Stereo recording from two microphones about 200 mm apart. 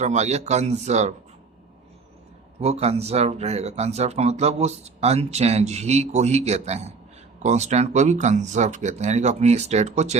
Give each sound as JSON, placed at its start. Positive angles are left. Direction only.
{"t": 0.0, "sound": "speech", "side_deg": -35}
{"t": 2.6, "sound": "speech", "side_deg": -30}